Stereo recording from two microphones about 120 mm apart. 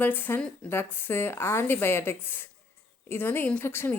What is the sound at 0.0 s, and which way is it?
A woman's voice, 15° left (ahead or behind).